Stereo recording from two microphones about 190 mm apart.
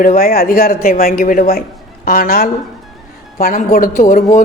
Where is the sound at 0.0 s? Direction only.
50° left (ahead or behind).